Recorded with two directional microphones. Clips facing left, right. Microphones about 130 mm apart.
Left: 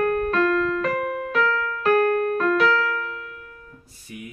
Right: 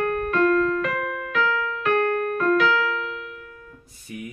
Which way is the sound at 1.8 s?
35° left (ahead or behind).